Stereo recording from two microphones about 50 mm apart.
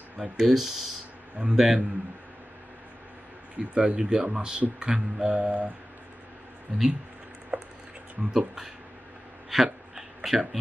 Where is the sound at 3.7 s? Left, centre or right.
Right.